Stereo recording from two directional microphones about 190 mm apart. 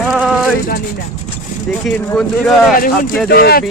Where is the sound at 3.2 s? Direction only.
55° left (ahead or behind).